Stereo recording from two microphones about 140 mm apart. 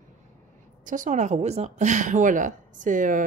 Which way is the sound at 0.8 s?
70° right (ahead or behind).